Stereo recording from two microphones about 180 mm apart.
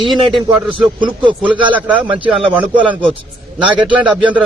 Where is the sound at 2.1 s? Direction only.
30° right (ahead or behind).